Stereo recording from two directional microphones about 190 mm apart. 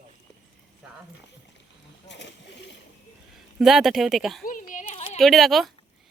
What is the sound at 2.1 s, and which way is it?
Splash, 65° left (ahead or behind).